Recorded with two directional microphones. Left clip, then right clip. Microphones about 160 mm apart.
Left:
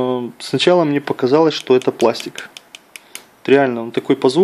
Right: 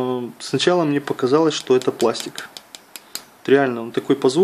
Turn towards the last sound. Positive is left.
turn(degrees=30)  # may be behind; listen again after turning